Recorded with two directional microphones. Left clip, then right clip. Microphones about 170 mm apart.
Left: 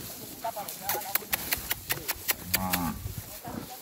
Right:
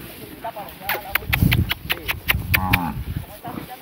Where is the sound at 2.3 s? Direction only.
30° left (ahead or behind).